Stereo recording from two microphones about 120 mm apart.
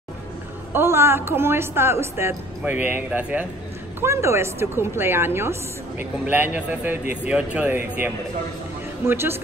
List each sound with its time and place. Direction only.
0.7 s a woman's voice: 20° right (ahead or behind)
4.0 s a woman's voice: 20° right (ahead or behind)
9.0 s a woman's voice: 20° right (ahead or behind)